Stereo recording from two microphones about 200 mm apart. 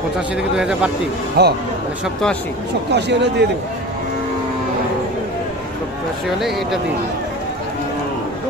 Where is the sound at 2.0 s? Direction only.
Centre (ahead or behind).